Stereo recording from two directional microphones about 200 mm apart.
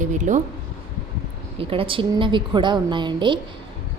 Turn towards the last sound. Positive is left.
turn(degrees=-25)  # may be behind; listen again after turning